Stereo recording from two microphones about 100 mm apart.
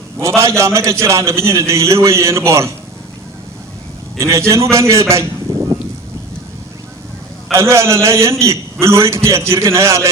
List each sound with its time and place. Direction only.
0.2 s a man's voice: 30° right (ahead or behind)
4.2 s a man's voice: 30° right (ahead or behind)
5.5 s a sound: 35° right (ahead or behind)
7.5 s a man's voice: 30° right (ahead or behind)